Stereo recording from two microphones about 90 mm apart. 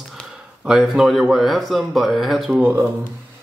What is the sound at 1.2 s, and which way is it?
Speech, centre (ahead or behind).